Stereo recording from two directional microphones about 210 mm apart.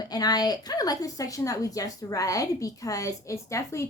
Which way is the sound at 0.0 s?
20° left (ahead or behind).